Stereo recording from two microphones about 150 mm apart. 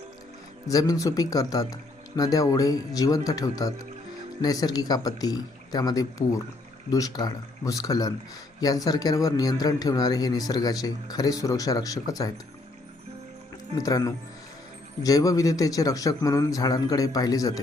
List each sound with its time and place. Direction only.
0.7 s speech: 25° left (ahead or behind)
13.7 s speech: 25° left (ahead or behind)